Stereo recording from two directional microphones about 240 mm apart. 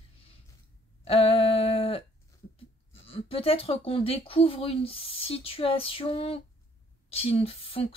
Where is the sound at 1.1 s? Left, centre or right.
Left.